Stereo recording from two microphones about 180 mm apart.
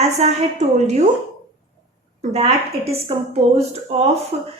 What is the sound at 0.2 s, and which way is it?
Speech, 40° right (ahead or behind).